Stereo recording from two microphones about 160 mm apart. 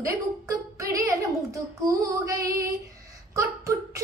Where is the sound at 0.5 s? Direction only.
20° right (ahead or behind).